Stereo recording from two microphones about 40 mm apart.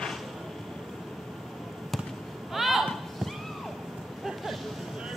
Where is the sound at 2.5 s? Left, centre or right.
Centre.